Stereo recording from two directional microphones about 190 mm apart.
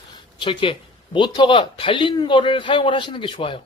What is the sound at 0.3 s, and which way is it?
Speech, 25° left (ahead or behind).